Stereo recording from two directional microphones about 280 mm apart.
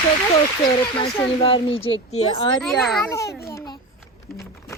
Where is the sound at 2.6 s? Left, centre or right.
Centre.